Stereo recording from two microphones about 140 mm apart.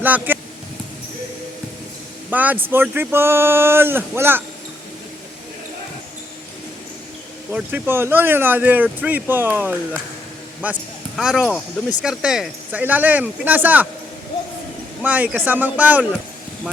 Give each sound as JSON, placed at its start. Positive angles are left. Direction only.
{"t": 0.0, "sound": "speech", "side_deg": -10}
{"t": 2.3, "sound": "speech", "side_deg": -10}
{"t": 7.5, "sound": "speech", "side_deg": -15}
{"t": 15.0, "sound": "speech", "side_deg": -10}